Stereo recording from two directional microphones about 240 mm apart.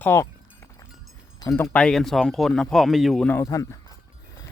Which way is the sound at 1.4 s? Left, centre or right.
Centre.